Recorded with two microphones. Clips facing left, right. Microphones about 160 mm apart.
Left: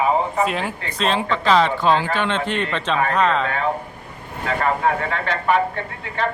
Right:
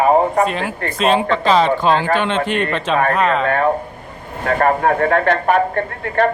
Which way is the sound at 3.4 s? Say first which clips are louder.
Right 6 dB; 55° right (ahead or behind).